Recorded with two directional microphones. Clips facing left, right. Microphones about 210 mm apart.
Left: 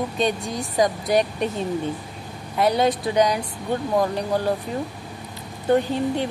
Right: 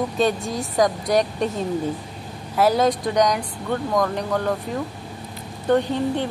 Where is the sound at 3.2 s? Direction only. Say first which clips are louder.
Right 1 dB; 25° left (ahead or behind).